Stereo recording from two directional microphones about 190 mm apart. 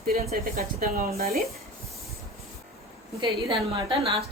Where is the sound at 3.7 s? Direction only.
30° right (ahead or behind).